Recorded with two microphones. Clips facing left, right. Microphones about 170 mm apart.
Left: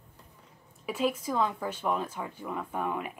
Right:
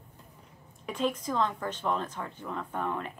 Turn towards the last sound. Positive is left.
turn(degrees=10)  # may be behind; listen again after turning